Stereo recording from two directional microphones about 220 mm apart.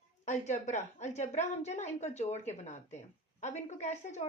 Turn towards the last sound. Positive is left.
turn(degrees=30)  # may be behind; listen again after turning